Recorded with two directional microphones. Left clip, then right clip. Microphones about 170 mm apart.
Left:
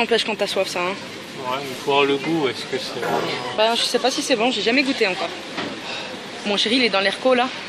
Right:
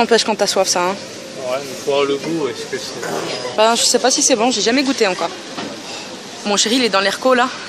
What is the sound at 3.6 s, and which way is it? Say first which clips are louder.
Speech: right 5 dB; 30° right (ahead or behind).